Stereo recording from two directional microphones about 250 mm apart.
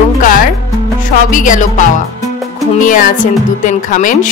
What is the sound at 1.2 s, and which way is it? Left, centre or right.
Music, left.